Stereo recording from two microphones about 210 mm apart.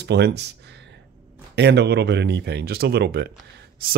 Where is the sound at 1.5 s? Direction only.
55° right (ahead or behind).